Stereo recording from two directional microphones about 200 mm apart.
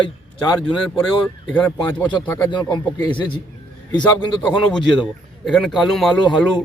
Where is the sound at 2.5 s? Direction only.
20° left (ahead or behind).